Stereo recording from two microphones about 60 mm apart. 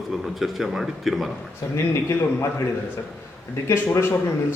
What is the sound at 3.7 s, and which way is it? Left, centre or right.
Speech, left.